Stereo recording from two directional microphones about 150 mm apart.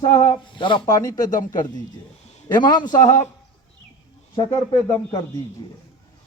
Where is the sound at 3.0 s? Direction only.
50° left (ahead or behind).